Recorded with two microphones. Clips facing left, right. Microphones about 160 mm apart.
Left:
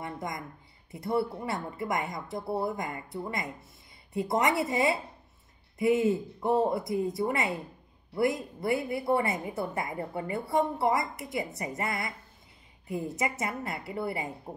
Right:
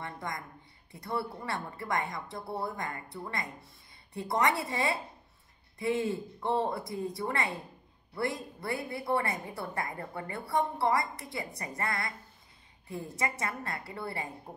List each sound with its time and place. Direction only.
0.0 s a woman's voice: 20° left (ahead or behind)